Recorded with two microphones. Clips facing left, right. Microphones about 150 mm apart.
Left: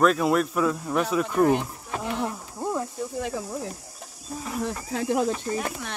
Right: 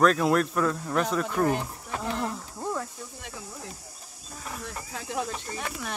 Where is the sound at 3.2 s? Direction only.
90° left.